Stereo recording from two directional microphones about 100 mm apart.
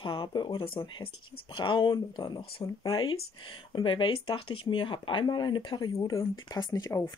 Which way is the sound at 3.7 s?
55° left (ahead or behind).